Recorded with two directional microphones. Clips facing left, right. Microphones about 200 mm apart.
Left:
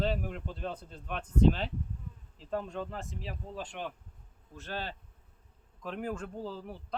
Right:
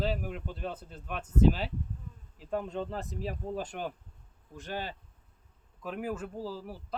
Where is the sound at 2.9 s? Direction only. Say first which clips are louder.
Right 5 dB; 35° right (ahead or behind).